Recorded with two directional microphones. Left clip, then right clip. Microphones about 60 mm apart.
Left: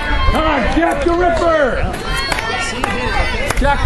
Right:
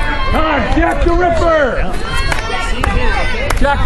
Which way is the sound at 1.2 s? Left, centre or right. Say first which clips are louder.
Right 2 dB; right.